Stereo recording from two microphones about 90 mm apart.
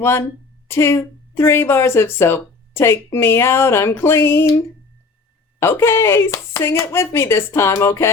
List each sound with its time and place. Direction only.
0.0 s speech: 30° left (ahead or behind)
5.5 s speech: 30° left (ahead or behind)